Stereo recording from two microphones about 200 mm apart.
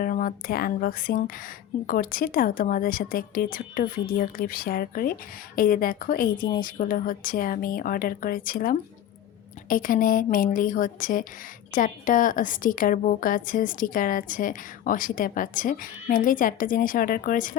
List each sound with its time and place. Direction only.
0.0 s a woman's voice: 45° left (ahead or behind)